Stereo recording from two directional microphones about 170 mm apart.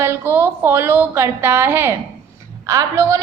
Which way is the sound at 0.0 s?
15° right (ahead or behind).